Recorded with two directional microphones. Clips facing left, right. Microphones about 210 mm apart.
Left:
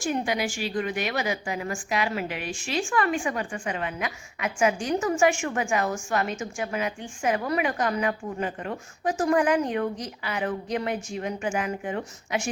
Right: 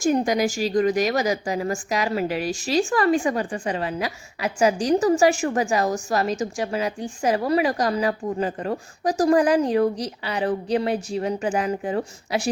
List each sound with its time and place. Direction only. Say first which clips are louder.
0.0 s a woman's voice: right 7 dB; 40° right (ahead or behind)